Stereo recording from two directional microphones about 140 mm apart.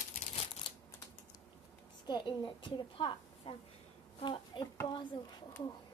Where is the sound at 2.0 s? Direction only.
35° left (ahead or behind).